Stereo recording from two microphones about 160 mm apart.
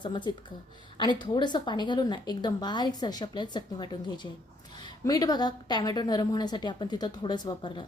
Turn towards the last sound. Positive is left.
turn(degrees=30)  # may be behind; listen again after turning